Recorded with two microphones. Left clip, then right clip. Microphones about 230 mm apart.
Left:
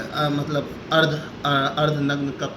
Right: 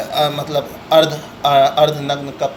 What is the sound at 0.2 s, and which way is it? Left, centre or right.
Speech, centre.